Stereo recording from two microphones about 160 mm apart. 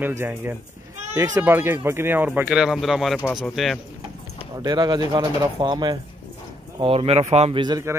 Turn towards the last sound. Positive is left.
turn(degrees=-25)  # may be behind; listen again after turning